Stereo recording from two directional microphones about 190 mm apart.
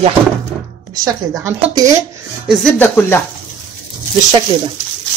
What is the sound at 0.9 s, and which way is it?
A woman's voice, 15° right (ahead or behind).